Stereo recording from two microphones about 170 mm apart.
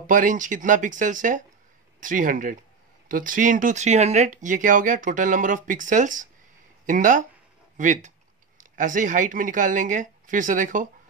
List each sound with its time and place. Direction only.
0.0 s speech: 50° right (ahead or behind)